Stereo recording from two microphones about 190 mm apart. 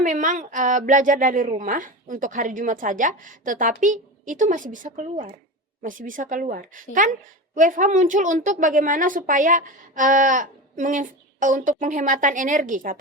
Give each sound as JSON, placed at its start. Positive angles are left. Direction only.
{"t": 0.0, "sound": "a woman's voice", "side_deg": -40}